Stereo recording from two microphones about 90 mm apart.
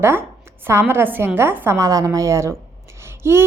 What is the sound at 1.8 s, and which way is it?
Speech, 40° right (ahead or behind).